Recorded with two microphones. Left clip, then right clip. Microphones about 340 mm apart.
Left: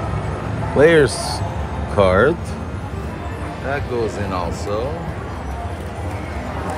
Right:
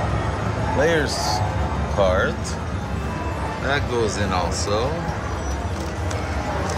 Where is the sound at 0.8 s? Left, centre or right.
Left.